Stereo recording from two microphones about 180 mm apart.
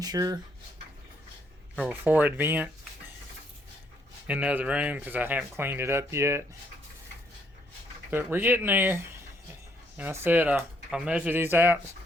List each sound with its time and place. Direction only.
0.0 s speech: 20° right (ahead or behind)
1.8 s speech: 10° right (ahead or behind)
4.3 s speech: 5° right (ahead or behind)
8.1 s speech: 10° right (ahead or behind)